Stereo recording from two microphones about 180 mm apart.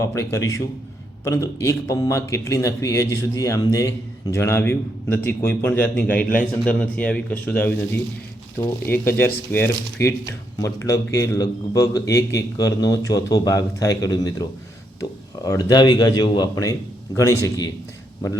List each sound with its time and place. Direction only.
0.0 s speech: 15° left (ahead or behind)
15.4 s speech: 20° left (ahead or behind)